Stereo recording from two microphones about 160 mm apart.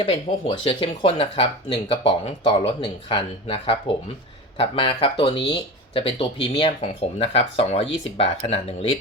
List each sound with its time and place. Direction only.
0.0 s speech: 35° left (ahead or behind)